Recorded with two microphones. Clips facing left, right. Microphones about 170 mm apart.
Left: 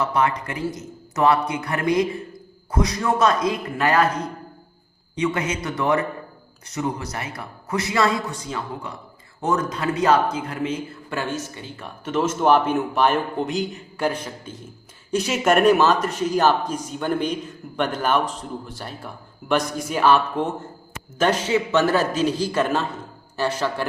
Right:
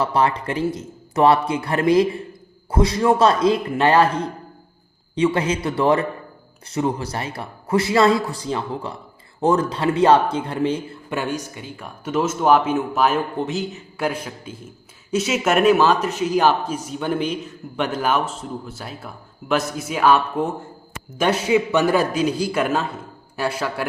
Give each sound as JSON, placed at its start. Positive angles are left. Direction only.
{"t": 0.0, "sound": "a man's voice", "side_deg": -30}
{"t": 11.1, "sound": "speech", "side_deg": -15}